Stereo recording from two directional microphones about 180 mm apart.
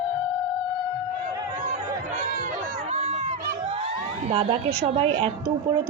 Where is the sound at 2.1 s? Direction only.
45° right (ahead or behind).